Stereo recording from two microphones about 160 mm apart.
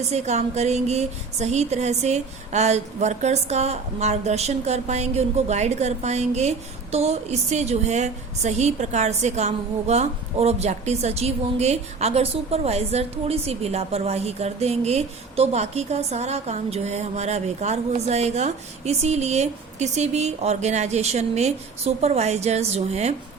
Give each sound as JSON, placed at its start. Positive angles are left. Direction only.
{"t": 0.1, "sound": "a woman's voice", "side_deg": -45}